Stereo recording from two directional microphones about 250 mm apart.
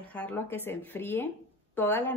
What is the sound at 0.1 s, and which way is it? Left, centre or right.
Speech, centre.